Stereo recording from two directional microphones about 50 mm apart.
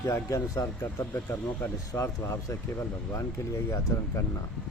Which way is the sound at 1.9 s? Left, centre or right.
Left.